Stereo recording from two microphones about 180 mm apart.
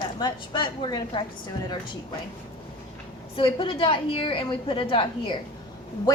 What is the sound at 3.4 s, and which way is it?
A woman's voice, 30° left (ahead or behind).